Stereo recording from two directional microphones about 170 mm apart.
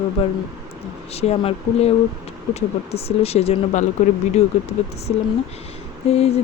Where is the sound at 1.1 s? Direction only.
35° left (ahead or behind).